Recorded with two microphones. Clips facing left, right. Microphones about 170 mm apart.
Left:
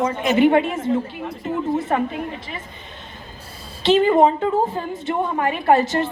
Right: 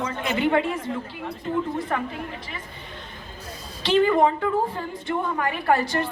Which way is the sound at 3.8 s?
25° left (ahead or behind).